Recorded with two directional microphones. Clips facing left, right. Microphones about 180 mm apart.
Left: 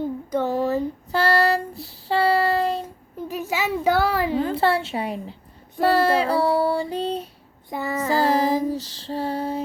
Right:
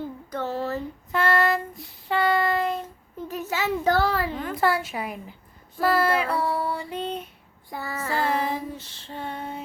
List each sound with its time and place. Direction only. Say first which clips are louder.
0.3 s a sound: left 6 dB; 15° left (ahead or behind)
1.1 s child singing: left 2 dB; 35° left (ahead or behind)
3.2 s child singing: left 2 dB; 10° left (ahead or behind)
4.4 s a sound: left 4 dB; 30° left (ahead or behind)
7.7 s child singing: left 7 dB; 20° left (ahead or behind)
8.1 s child singing: left 6 dB; 35° left (ahead or behind)